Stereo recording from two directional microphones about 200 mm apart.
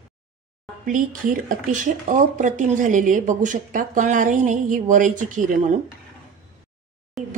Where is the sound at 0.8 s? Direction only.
40° right (ahead or behind).